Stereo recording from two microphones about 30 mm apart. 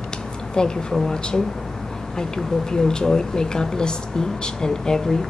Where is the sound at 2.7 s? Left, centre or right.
Left.